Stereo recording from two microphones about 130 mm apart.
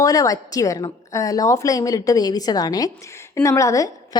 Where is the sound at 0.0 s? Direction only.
25° left (ahead or behind).